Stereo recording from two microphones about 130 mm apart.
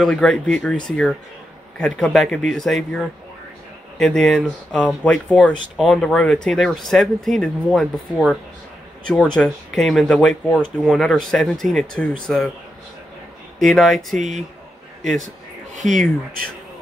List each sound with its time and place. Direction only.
0.0 s speech: 5° left (ahead or behind)
4.0 s speech: 5° left (ahead or behind)
5.4 s speech: 5° right (ahead or behind)
13.6 s speech: centre (ahead or behind)
14.1 s speech: 70° right (ahead or behind)